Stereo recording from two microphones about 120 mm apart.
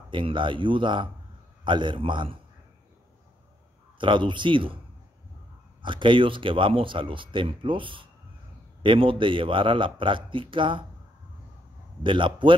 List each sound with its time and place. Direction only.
0.1 s a man's voice: 45° right (ahead or behind)
4.0 s speech: 40° right (ahead or behind)
5.8 s speech: 40° right (ahead or behind)
12.0 s speech: 45° right (ahead or behind)